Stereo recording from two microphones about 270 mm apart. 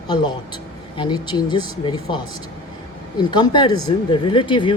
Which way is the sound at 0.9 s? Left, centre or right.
Centre.